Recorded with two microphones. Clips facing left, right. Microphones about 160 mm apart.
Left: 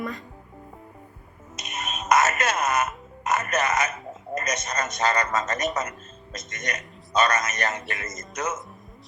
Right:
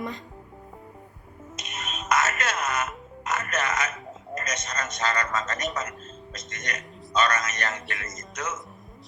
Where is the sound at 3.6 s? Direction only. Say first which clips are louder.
Left 4 dB; 15° left (ahead or behind).